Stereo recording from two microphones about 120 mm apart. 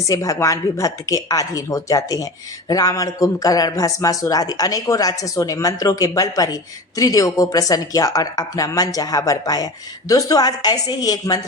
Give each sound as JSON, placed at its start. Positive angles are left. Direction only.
{"t": 0.1, "sound": "speech", "side_deg": 30}